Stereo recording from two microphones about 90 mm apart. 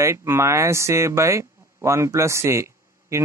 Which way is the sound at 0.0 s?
30° right (ahead or behind).